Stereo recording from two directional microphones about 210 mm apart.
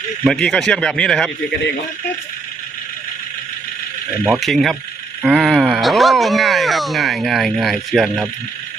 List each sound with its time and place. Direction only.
0.3 s speech: 5° left (ahead or behind)
4.2 s speech: centre (ahead or behind)